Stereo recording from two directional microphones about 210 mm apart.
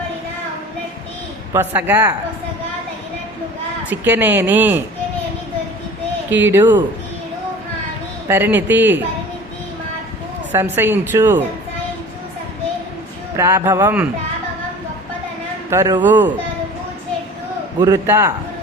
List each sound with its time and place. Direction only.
1.5 s a woman's voice: 10° right (ahead or behind)
3.8 s a woman's voice: 10° right (ahead or behind)
6.3 s a woman's voice: 10° right (ahead or behind)
8.3 s a woman's voice: 10° right (ahead or behind)
10.5 s a woman's voice: 10° right (ahead or behind)
13.3 s a woman's voice: 15° right (ahead or behind)
15.7 s a woman's voice: 15° right (ahead or behind)
17.7 s a woman's voice: 20° right (ahead or behind)